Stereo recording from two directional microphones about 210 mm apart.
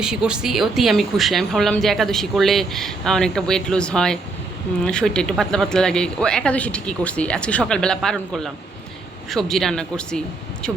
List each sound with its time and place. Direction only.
0.0 s speech: 5° right (ahead or behind)